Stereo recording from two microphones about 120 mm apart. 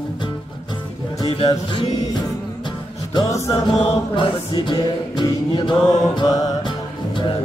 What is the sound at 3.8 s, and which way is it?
Speech, 50° left (ahead or behind).